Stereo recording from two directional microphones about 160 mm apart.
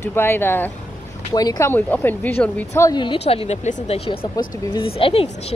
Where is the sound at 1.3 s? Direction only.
25° left (ahead or behind).